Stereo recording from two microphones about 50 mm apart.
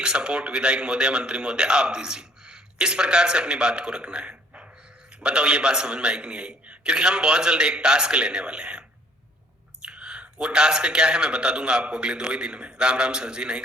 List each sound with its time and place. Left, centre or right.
0.0 s a man's voice: centre
9.8 s speech: centre